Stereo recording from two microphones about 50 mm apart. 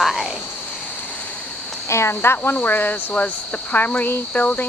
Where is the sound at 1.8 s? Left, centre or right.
Left.